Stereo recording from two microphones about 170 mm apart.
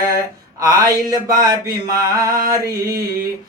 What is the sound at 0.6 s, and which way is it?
Mantra, 20° right (ahead or behind).